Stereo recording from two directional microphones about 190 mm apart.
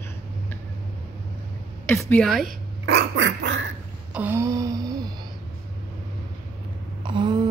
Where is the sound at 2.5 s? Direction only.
60° right (ahead or behind).